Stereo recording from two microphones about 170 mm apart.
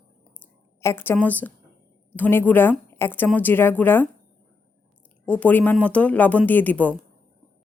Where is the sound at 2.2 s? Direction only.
10° left (ahead or behind).